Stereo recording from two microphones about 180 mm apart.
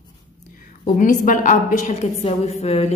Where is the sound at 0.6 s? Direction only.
50° left (ahead or behind).